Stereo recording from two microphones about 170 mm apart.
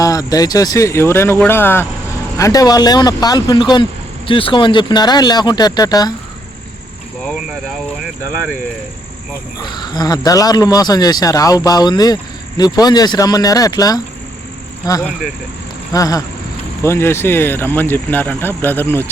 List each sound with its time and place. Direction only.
0.0 s speech: 20° left (ahead or behind)
9.6 s speech: 25° left (ahead or behind)